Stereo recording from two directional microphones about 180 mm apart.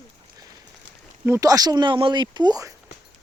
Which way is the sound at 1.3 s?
20° right (ahead or behind).